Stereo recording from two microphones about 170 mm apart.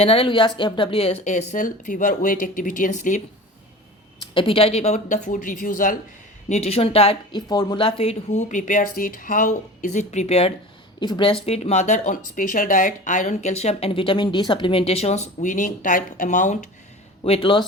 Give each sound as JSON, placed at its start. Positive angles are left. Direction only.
{"t": 0.0, "sound": "speech", "side_deg": 35}
{"t": 4.2, "sound": "speech", "side_deg": 30}
{"t": 6.5, "sound": "speech", "side_deg": 35}
{"t": 17.2, "sound": "speech", "side_deg": 35}